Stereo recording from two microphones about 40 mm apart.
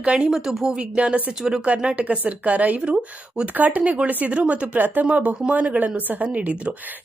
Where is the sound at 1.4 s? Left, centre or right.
Centre.